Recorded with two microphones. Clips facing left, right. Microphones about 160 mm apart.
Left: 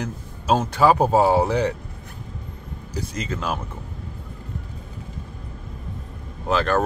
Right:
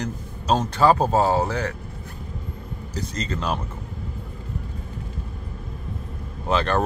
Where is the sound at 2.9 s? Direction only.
10° left (ahead or behind).